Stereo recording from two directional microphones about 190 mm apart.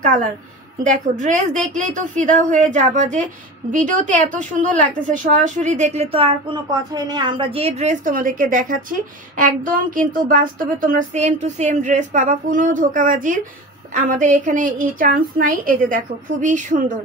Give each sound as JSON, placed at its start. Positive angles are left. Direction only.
{"t": 0.8, "sound": "speech", "side_deg": -40}